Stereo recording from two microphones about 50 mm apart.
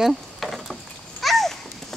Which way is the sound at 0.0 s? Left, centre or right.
Centre.